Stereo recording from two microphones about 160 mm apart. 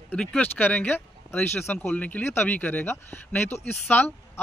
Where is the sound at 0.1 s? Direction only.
5° left (ahead or behind).